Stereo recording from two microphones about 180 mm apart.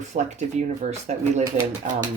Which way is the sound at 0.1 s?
40° right (ahead or behind).